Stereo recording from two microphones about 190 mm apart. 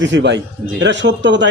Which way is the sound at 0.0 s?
70° right (ahead or behind).